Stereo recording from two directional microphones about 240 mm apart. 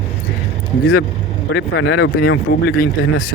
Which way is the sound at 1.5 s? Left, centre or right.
Left.